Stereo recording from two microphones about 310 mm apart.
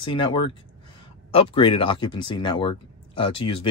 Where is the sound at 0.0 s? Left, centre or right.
Centre.